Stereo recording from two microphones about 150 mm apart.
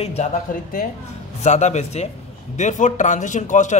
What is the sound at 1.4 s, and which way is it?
A man's voice, 50° left (ahead or behind).